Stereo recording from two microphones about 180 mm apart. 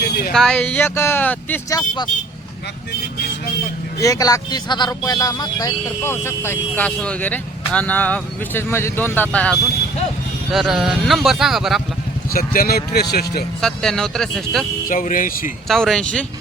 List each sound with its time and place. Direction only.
0.0 s a sound: 60° left (ahead or behind)
0.3 s speech: 5° left (ahead or behind)
4.0 s speech: 20° left (ahead or behind); by 11.8 s centre (ahead or behind)
12.3 s a man's voice: 55° left (ahead or behind)
13.6 s speech: 5° left (ahead or behind)
14.8 s speech: 50° left (ahead or behind)
15.6 s speech: centre (ahead or behind)